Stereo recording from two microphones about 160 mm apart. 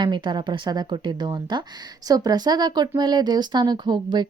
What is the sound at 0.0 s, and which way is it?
Speech, 30° right (ahead or behind).